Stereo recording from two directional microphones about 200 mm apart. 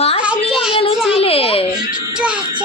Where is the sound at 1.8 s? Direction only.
5° right (ahead or behind).